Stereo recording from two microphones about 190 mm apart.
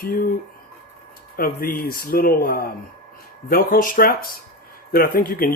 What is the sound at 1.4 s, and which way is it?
Speech, 50° left (ahead or behind).